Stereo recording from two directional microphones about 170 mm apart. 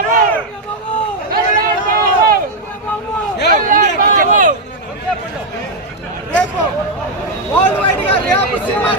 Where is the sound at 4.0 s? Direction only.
55° right (ahead or behind).